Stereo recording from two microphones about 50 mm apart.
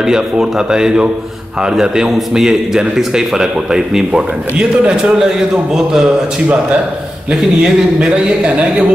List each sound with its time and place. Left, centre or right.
0.0 s speech: centre
7.2 s speech: centre
8.5 s speech: right